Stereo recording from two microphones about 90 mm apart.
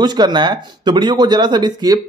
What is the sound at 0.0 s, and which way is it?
Speech, 55° right (ahead or behind).